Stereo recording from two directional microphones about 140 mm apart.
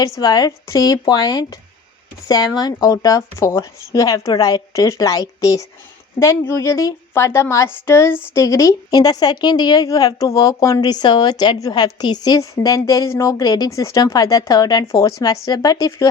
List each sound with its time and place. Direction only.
0.0 s speech: 30° left (ahead or behind)